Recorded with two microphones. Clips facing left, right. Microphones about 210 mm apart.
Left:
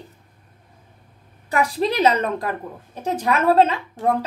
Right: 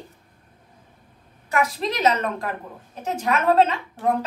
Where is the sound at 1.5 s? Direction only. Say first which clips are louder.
Left 3 dB; 35° left (ahead or behind).